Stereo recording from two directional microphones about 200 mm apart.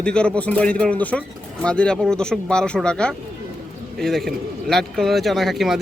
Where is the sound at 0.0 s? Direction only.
5° left (ahead or behind).